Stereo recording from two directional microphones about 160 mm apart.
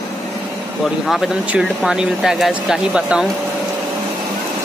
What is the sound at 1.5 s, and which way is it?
Speech, 5° right (ahead or behind).